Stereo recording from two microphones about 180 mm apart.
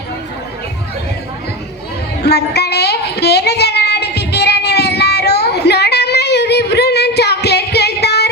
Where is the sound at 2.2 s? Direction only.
65° left (ahead or behind).